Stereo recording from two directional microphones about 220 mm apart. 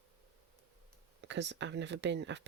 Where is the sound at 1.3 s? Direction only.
55° right (ahead or behind).